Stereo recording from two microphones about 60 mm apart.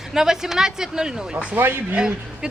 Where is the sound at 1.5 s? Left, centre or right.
Right.